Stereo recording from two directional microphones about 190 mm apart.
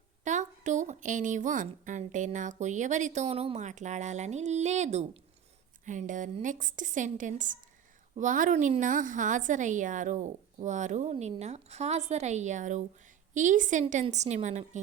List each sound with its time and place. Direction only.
0.3 s a woman's voice: 40° right (ahead or behind)